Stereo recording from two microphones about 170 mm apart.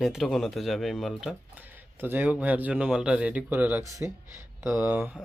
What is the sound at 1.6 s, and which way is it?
Speech, 10° right (ahead or behind).